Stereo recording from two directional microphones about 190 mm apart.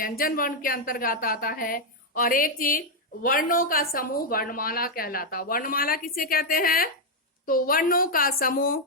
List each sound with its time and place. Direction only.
0.0 s a woman's voice: 50° left (ahead or behind)